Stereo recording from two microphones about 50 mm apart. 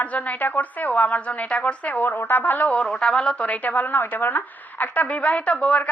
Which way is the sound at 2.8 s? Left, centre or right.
Centre.